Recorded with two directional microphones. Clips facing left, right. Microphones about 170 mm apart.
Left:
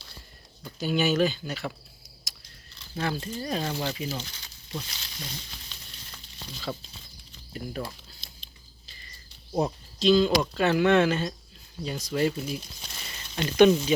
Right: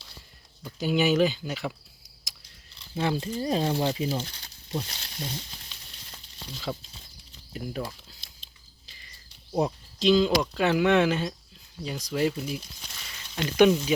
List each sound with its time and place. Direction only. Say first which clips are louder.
0.6 s speech: right 1 dB; 15° right (ahead or behind)
2.3 s a sound: right 1 dB; 15° right (ahead or behind)
2.9 s speech: right 3 dB; 20° right (ahead or behind)
4.2 s a sound: right 4 dB; 55° right (ahead or behind)
4.8 s speech: right 5 dB; 50° right (ahead or behind)
6.7 s speech: right 1 dB; 5° right (ahead or behind)
9.5 s speech: right 1 dB; centre (ahead or behind)
10.0 s speech: even; 15° right (ahead or behind)